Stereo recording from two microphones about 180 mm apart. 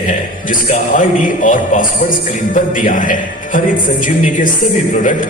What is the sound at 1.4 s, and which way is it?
A man's voice, 45° left (ahead or behind).